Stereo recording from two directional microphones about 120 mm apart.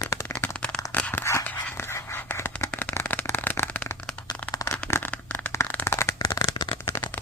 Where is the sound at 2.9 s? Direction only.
15° left (ahead or behind).